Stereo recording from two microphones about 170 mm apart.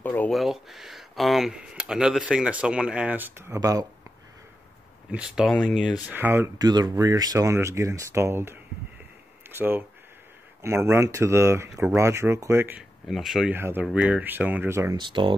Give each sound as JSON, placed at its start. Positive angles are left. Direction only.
{"t": 0.0, "sound": "speech", "side_deg": 10}
{"t": 0.4, "sound": "speech", "side_deg": 0}
{"t": 5.1, "sound": "speech", "side_deg": -5}
{"t": 6.0, "sound": "speech", "side_deg": -10}
{"t": 13.6, "sound": "speech", "side_deg": -15}
{"t": 15.0, "sound": "speech", "side_deg": -30}